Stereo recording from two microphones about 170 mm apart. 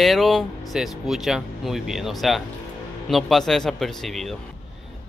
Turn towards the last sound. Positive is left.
turn(degrees=0)  # may be behind; listen again after turning